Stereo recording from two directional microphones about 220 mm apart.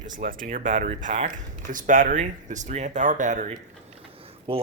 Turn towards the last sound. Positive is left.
turn(degrees=-25)  # may be behind; listen again after turning